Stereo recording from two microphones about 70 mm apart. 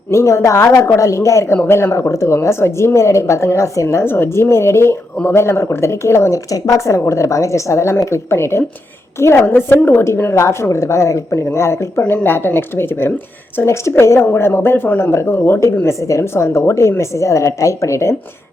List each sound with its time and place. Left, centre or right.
0.1 s a woman's voice: left
6.5 s a woman's voice: left
9.5 s a woman's voice: left
10.0 s a woman's voice: left
14.0 s a woman's voice: left